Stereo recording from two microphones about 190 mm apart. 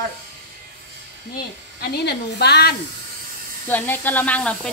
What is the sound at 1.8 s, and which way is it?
Speech, 60° left (ahead or behind).